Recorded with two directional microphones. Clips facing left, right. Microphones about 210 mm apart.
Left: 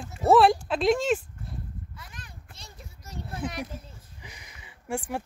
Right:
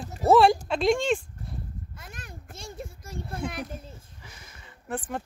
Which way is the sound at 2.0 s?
45° right (ahead or behind).